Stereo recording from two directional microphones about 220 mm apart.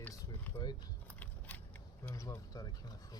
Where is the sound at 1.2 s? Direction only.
5° left (ahead or behind).